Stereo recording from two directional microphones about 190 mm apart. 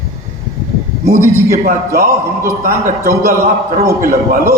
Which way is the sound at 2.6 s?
50° right (ahead or behind).